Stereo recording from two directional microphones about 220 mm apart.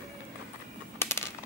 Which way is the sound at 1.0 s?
10° left (ahead or behind).